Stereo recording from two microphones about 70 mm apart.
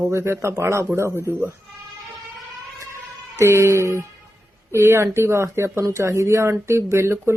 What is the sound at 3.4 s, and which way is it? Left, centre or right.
Speech, right.